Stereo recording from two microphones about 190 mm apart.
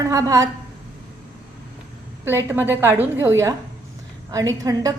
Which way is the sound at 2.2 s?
10° right (ahead or behind).